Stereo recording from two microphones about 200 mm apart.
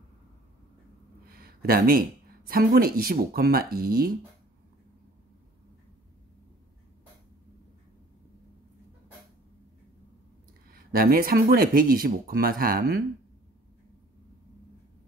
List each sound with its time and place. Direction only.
1.2 s speech: 50° right (ahead or behind)
10.7 s speech: 45° right (ahead or behind)